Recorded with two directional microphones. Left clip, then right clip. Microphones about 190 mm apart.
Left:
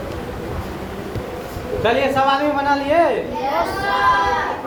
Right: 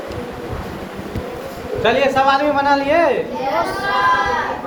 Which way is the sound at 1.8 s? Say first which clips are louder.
Right 2 dB; 20° right (ahead or behind).